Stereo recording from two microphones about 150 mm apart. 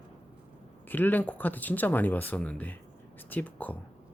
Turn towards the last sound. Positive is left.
turn(degrees=10)  # may be behind; listen again after turning